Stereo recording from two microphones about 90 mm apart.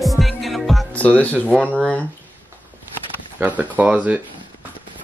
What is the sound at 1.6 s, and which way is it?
Speech, 15° left (ahead or behind).